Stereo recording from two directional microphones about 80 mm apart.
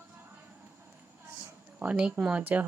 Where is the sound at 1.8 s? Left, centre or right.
Centre.